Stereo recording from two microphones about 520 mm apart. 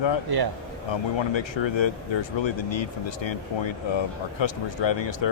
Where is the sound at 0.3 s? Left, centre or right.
Right.